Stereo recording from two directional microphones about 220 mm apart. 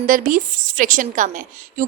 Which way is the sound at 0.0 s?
40° right (ahead or behind).